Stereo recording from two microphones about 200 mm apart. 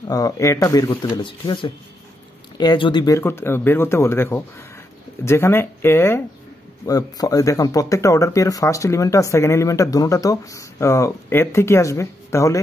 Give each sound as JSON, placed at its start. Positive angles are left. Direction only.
{"t": 0.1, "sound": "speech", "side_deg": 15}